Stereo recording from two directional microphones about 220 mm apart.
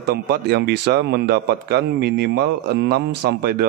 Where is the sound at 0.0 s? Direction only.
45° right (ahead or behind).